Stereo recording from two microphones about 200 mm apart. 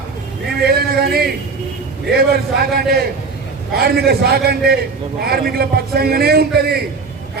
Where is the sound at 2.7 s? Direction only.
50° right (ahead or behind).